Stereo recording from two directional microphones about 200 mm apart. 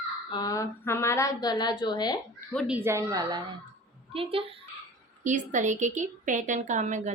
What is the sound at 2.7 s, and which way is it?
A woman's voice, 10° right (ahead or behind).